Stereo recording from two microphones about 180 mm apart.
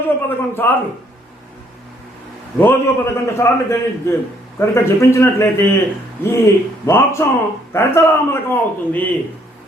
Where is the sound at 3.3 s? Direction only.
15° left (ahead or behind).